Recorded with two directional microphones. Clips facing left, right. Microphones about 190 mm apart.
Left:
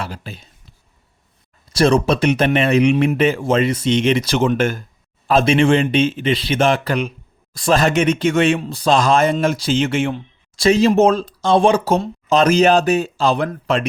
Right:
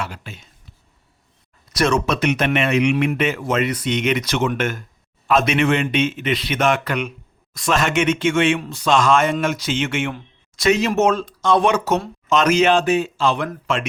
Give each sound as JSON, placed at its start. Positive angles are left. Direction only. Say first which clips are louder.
{"t": 0.0, "sound": "speech", "louder": "left 1 dB", "side_deg": 35}
{"t": 1.7, "sound": "speech", "louder": "left 4 dB", "side_deg": 30}